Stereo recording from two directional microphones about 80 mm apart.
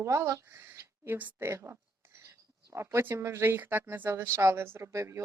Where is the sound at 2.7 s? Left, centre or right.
Right.